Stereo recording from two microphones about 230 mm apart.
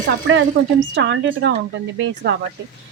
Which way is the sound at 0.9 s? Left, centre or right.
Right.